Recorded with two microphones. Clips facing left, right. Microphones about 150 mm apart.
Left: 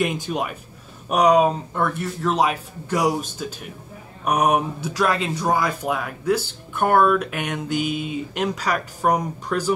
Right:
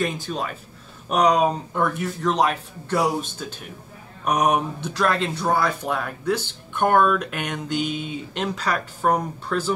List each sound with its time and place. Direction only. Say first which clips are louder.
0.0 s a man's voice: left 2 dB; 15° left (ahead or behind)